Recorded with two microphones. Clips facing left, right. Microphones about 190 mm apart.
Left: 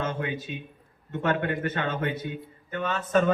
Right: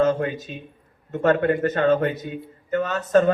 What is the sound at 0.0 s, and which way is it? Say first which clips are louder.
A man's voice: right 9 dB; 40° right (ahead or behind).